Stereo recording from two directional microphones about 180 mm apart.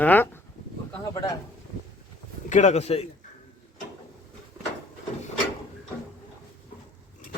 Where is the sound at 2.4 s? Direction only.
40° left (ahead or behind).